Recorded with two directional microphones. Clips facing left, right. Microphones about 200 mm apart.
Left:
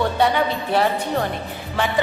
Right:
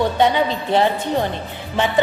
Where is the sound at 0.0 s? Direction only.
20° right (ahead or behind).